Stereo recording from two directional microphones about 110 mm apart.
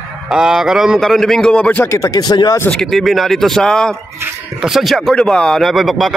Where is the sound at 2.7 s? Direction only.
Centre (ahead or behind).